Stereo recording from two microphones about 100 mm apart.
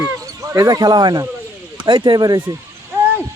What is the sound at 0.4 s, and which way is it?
Speech, 35° right (ahead or behind).